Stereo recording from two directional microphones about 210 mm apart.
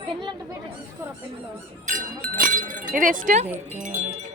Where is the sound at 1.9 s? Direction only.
40° right (ahead or behind).